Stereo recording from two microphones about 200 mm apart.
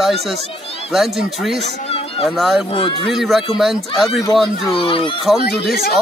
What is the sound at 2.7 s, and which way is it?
Speech, 25° left (ahead or behind).